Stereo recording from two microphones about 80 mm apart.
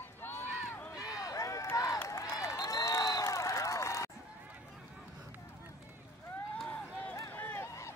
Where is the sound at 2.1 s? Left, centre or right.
Left.